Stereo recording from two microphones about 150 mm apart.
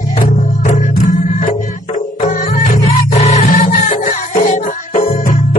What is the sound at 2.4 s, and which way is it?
Music, 50° left (ahead or behind).